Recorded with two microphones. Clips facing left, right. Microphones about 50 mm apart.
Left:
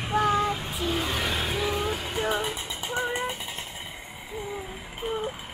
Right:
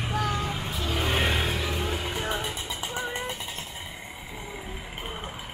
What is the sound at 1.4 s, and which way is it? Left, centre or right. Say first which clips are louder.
Vehicle: left 2 dB; centre.